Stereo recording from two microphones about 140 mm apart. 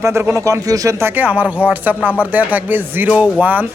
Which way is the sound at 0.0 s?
15° right (ahead or behind).